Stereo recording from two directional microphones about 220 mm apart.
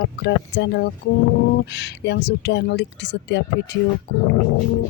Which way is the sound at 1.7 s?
50° left (ahead or behind).